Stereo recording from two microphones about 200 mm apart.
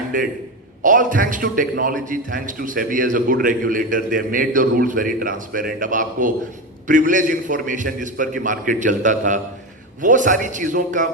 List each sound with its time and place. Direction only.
0.1 s a man's voice: 40° right (ahead or behind)